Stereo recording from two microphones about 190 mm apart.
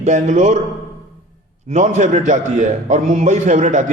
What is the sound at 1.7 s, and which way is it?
A man's voice, 40° right (ahead or behind).